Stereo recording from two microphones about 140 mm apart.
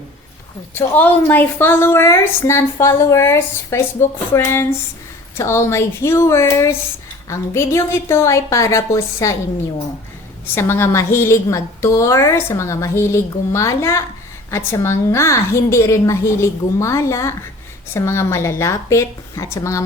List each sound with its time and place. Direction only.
0.7 s a woman's voice: 15° left (ahead or behind)
10.4 s a woman's voice: 15° left (ahead or behind)